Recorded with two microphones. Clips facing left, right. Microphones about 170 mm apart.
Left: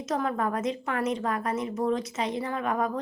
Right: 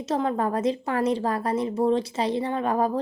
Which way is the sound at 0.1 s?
30° right (ahead or behind).